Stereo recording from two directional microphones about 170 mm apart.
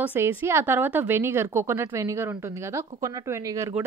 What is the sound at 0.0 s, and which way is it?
A woman's voice, 10° right (ahead or behind).